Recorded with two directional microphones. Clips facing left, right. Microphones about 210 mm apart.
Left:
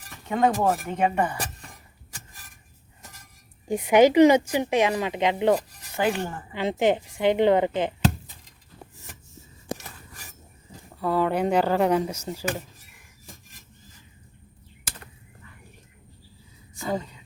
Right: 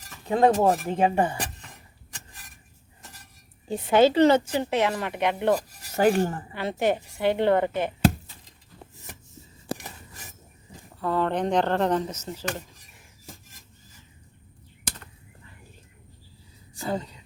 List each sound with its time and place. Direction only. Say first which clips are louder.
0.3 s speech: right 3 dB; 30° right (ahead or behind)
3.7 s speech: left 2 dB; 15° left (ahead or behind)
5.9 s cutlery: right 4 dB; 45° right (ahead or behind)
6.5 s speech: left 3 dB; 20° left (ahead or behind)
11.0 s speech: left 2 dB; 10° left (ahead or behind)